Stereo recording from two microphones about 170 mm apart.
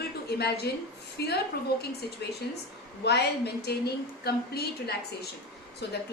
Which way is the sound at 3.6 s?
70° left (ahead or behind).